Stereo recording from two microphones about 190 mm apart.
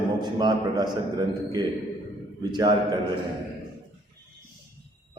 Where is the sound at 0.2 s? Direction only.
20° right (ahead or behind).